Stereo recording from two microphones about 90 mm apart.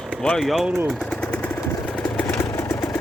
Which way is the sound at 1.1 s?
15° left (ahead or behind).